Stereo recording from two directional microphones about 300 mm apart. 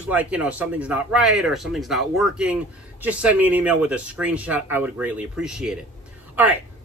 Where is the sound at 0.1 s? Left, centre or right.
Centre.